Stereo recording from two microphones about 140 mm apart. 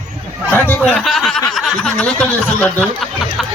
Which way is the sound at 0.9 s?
Centre (ahead or behind).